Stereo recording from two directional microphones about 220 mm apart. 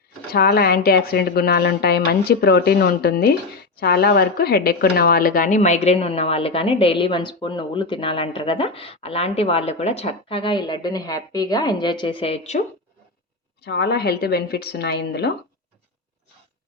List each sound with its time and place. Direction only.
0.3 s a woman's voice: 45° left (ahead or behind)
13.6 s a woman's voice: 50° left (ahead or behind)